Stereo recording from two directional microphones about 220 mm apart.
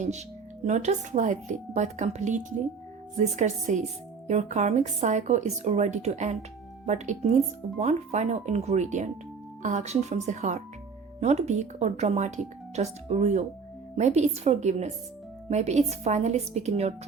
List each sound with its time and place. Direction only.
0.6 s a woman's voice: 30° right (ahead or behind)